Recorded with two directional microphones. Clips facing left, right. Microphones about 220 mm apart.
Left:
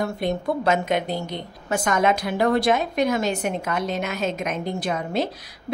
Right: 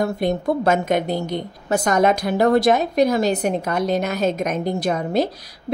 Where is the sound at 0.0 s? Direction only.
45° right (ahead or behind).